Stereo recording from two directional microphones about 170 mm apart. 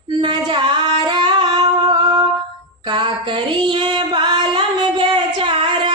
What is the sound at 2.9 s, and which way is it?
Music, 25° right (ahead or behind).